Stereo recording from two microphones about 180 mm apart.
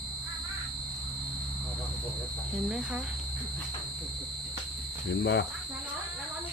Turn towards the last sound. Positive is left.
turn(degrees=75)  # may be behind; listen again after turning